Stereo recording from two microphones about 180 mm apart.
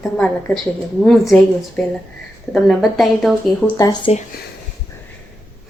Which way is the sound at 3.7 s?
20° left (ahead or behind).